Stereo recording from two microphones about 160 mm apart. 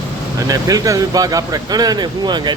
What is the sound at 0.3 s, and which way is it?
Speech, 20° right (ahead or behind).